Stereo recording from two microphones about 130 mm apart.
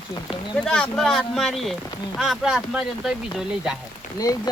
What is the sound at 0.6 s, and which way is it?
Speech, 5° left (ahead or behind).